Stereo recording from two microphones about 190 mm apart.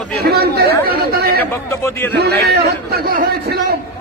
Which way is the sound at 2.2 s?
55° right (ahead or behind).